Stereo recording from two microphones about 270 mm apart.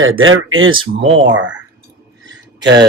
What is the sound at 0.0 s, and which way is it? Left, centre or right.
Speech, right.